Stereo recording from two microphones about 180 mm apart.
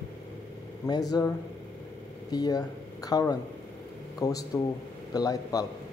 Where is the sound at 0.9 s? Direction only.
20° left (ahead or behind).